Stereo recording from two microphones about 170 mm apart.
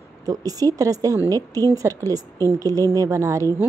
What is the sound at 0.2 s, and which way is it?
A woman's voice, 20° right (ahead or behind).